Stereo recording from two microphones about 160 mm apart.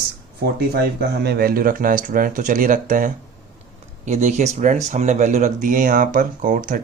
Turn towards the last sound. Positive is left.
turn(degrees=-55)  # may be behind; listen again after turning